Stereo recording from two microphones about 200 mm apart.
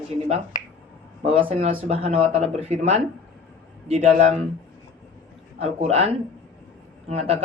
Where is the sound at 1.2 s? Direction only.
30° right (ahead or behind).